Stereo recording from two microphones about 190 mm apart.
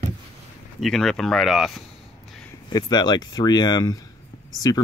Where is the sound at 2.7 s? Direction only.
20° left (ahead or behind).